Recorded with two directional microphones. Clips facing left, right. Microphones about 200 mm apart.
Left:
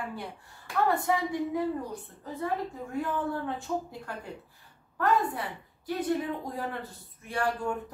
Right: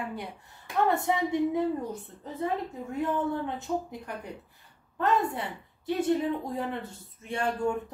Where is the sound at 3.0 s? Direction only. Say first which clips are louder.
Right 3 dB; 20° right (ahead or behind).